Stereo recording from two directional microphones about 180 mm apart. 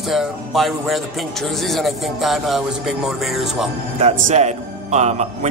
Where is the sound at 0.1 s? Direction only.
Centre (ahead or behind).